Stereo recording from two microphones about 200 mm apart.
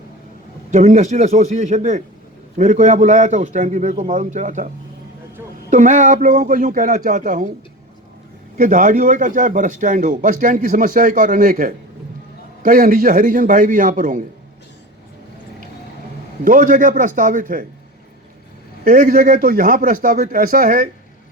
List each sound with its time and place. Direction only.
0.7 s a man's voice: 35° right (ahead or behind)
5.7 s a man's voice: 40° right (ahead or behind)
8.5 s a man's voice: 40° right (ahead or behind)
16.4 s a man's voice: 40° right (ahead or behind)
18.9 s a man's voice: 45° right (ahead or behind)